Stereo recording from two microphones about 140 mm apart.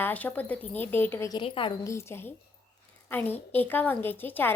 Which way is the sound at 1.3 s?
35° left (ahead or behind).